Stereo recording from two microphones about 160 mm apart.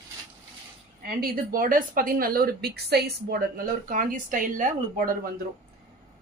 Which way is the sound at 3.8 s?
60° right (ahead or behind).